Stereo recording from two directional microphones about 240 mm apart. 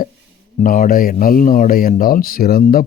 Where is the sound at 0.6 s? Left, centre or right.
Left.